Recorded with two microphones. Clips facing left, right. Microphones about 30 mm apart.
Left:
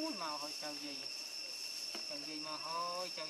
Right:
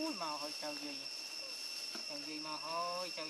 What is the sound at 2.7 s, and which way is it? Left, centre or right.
Speech, centre.